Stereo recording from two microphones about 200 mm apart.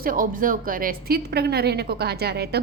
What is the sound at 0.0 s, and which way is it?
A woman's voice, 45° right (ahead or behind).